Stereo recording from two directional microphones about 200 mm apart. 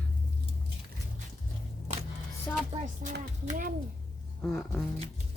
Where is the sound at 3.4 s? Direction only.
40° right (ahead or behind).